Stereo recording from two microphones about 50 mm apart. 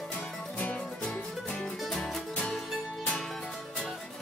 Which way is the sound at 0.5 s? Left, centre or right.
Left.